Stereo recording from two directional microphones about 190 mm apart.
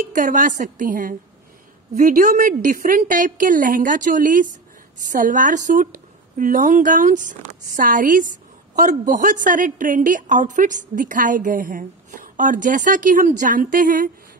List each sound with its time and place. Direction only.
0.1 s a woman's voice: 45° right (ahead or behind)